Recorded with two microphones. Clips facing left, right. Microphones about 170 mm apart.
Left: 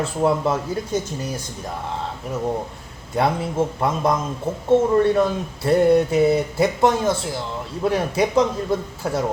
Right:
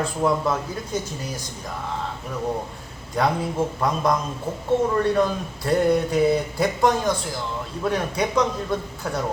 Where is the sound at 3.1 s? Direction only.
25° left (ahead or behind).